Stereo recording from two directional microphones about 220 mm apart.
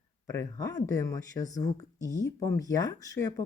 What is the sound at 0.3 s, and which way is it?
Speech, 15° left (ahead or behind).